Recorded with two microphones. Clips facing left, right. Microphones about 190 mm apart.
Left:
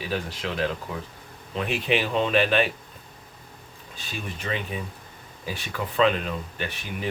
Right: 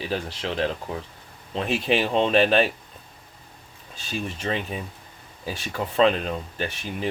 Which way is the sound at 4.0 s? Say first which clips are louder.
Right 5 dB; 30° right (ahead or behind).